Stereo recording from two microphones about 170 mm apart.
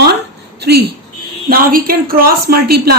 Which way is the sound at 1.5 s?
55° right (ahead or behind).